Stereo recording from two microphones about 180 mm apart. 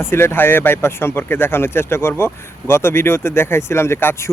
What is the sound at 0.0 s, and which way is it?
Speech, 15° left (ahead or behind).